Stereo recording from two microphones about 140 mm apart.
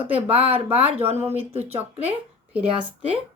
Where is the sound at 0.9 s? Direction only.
45° right (ahead or behind).